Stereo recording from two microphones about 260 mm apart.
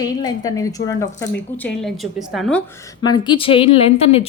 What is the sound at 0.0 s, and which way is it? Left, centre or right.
A woman's voice, centre.